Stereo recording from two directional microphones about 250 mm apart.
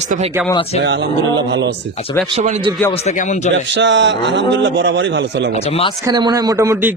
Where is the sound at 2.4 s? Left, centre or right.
Right.